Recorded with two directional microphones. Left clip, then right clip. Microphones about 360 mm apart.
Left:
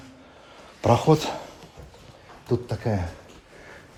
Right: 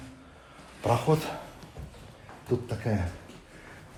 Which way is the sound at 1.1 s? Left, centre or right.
Left.